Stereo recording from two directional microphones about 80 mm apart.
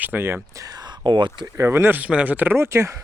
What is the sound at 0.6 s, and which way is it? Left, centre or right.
Speech, right.